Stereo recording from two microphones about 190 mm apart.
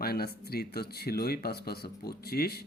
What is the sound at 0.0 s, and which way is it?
A man's voice, 55° left (ahead or behind).